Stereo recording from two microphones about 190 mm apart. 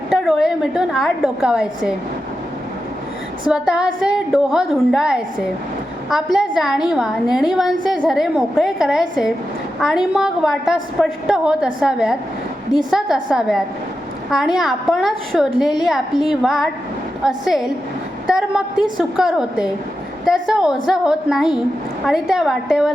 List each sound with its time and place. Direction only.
0.1 s a woman's voice: centre (ahead or behind)
3.4 s a woman's voice: 5° right (ahead or behind)